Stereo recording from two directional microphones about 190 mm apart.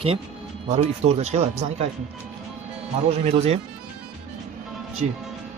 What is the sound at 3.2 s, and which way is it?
Speech, 35° right (ahead or behind).